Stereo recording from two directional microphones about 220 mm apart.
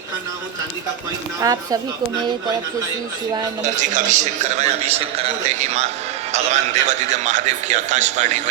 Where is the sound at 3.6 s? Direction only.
35° right (ahead or behind).